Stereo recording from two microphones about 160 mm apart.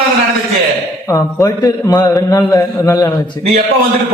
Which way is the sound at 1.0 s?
20° left (ahead or behind).